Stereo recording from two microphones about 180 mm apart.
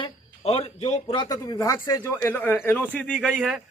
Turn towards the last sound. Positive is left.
turn(degrees=0)  # may be behind; listen again after turning